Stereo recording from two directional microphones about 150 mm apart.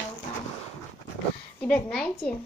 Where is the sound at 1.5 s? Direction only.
10° left (ahead or behind).